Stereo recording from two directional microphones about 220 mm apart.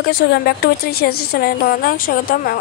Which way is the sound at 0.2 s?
45° left (ahead or behind).